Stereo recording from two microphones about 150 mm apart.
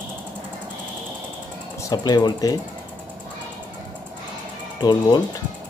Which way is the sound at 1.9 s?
25° left (ahead or behind).